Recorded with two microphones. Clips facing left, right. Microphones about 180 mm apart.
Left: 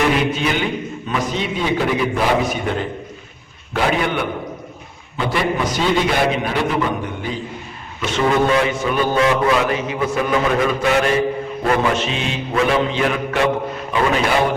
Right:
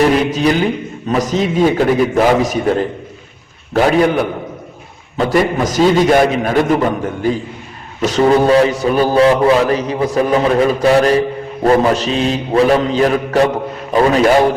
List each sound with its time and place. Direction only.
0.0 s a man's voice: 40° right (ahead or behind)
3.8 s a man's voice: 40° right (ahead or behind)